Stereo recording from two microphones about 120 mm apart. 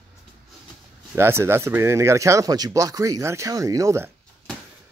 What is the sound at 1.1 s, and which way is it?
Speech, 20° right (ahead or behind).